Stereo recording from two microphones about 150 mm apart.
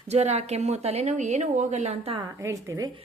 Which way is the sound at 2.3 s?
20° right (ahead or behind).